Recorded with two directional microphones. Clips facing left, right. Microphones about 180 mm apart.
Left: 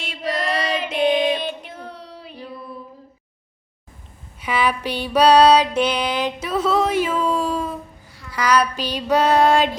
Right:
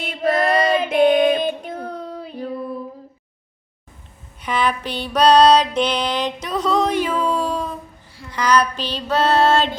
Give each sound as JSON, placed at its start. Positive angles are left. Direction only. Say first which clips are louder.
{"t": 0.0, "sound": "female singing", "louder": "right 6 dB", "side_deg": -50}
{"t": 4.4, "sound": "music", "louder": "even", "side_deg": 10}